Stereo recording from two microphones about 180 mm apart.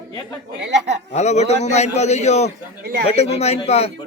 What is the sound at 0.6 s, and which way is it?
Speech, 75° right (ahead or behind).